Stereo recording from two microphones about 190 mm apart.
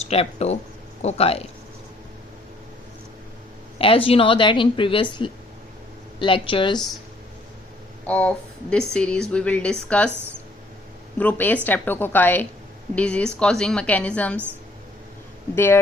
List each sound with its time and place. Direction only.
0.0 s speech: 35° left (ahead or behind)
3.8 s a woman's voice: 30° left (ahead or behind)
8.0 s speech: 5° left (ahead or behind)
11.2 s a woman's voice: 10° left (ahead or behind)
15.5 s a woman's voice: 10° left (ahead or behind)